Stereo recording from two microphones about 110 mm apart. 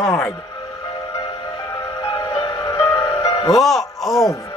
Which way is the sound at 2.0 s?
45° left (ahead or behind).